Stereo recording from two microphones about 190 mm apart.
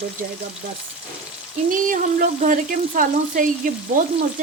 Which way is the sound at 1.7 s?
45° right (ahead or behind).